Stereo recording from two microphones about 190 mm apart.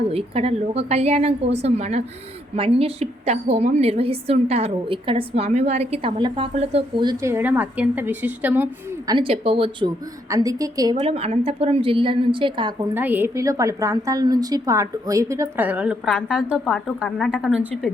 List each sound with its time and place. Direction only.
0.1 s a woman's voice: 30° right (ahead or behind); by 9.1 s 10° right (ahead or behind)
9.1 s a woman's voice: 30° right (ahead or behind)
10.2 s a woman's voice: 15° right (ahead or behind)
11.0 s a woman's voice: 35° right (ahead or behind)
12.9 s a woman's voice: 10° right (ahead or behind)